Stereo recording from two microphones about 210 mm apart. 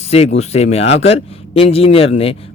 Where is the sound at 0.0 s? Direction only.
30° left (ahead or behind).